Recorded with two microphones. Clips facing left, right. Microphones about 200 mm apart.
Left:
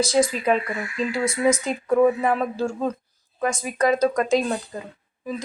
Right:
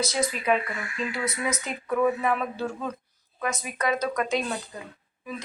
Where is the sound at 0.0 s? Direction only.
30° left (ahead or behind).